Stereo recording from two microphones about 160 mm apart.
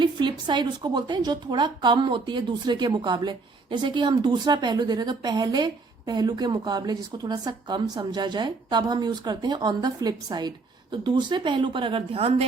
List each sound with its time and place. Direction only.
0.0 s a woman's voice: 30° right (ahead or behind)